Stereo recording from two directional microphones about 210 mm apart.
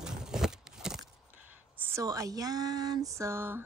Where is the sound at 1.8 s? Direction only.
15° right (ahead or behind).